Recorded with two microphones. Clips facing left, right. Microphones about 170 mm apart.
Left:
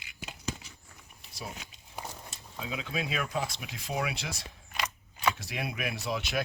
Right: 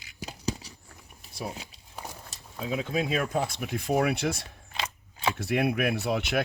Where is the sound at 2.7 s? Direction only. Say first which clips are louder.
Right 6 dB; 40° right (ahead or behind).